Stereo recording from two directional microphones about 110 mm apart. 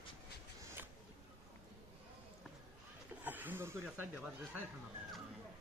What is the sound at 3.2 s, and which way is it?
Snake, 15° right (ahead or behind).